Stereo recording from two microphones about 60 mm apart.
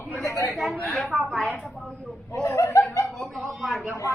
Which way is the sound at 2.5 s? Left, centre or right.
Left.